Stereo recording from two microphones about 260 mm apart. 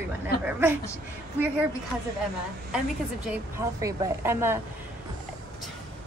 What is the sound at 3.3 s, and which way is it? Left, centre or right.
Speech, centre.